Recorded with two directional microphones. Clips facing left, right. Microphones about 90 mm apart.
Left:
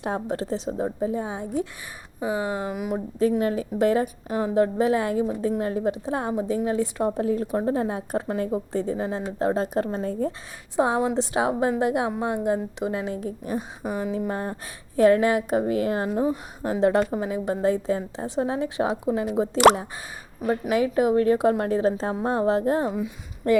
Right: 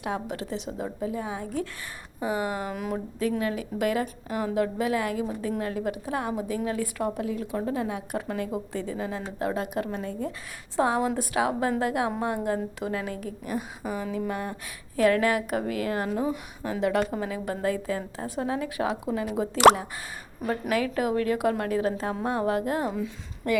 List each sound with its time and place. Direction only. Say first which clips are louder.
0.0 s a woman's voice: left 4 dB; 35° left (ahead or behind)
2.7 s speech: left 3 dB; 10° left (ahead or behind)
3.2 s a woman's voice: left 6 dB; 30° left (ahead or behind)
10.8 s a woman's voice: left 3 dB; 20° left (ahead or behind)
20.5 s a woman's voice: left 4 dB; 20° left (ahead or behind)